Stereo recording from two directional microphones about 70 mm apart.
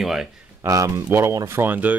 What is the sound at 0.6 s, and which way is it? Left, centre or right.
Speech, right.